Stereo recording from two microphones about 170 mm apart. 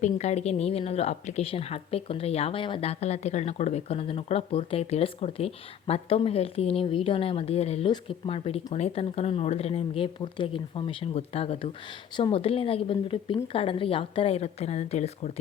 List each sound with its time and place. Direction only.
0.0 s speech: 40° left (ahead or behind)